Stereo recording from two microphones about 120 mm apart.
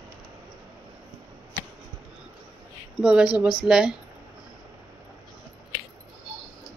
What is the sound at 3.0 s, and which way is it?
Speech, 5° right (ahead or behind).